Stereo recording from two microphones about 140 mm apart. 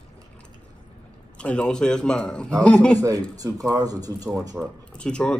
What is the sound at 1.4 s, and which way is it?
A man's voice, 10° left (ahead or behind).